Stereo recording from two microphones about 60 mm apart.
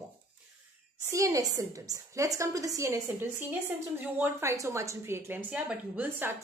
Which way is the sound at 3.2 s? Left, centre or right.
Right.